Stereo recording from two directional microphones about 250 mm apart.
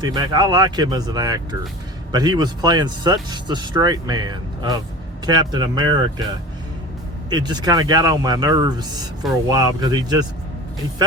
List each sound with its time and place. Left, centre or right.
0.0 s speech: centre
7.3 s speech: centre